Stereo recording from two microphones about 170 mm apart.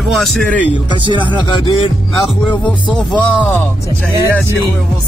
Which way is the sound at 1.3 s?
30° left (ahead or behind).